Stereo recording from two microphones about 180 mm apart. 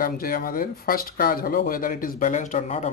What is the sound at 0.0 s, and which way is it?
Speech, 50° left (ahead or behind).